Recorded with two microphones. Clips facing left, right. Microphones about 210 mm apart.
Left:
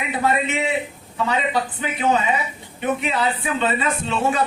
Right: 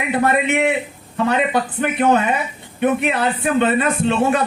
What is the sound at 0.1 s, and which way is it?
Speech, 60° right (ahead or behind).